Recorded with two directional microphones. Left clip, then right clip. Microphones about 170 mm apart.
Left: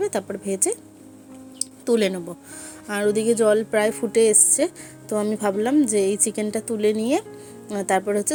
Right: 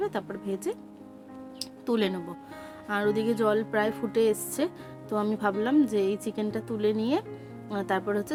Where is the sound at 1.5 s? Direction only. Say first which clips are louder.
Left 8 dB; 20° left (ahead or behind).